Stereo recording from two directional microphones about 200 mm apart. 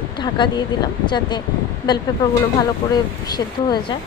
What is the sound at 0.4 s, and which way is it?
Speech, 25° left (ahead or behind).